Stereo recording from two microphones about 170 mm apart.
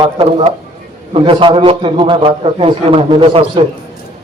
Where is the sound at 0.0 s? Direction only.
35° right (ahead or behind).